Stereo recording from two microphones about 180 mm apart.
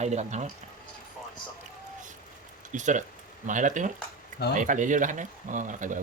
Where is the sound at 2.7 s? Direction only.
45° right (ahead or behind).